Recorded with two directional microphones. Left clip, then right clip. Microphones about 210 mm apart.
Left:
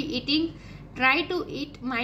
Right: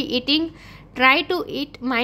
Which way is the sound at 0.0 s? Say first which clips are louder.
Right 5 dB; 55° right (ahead or behind).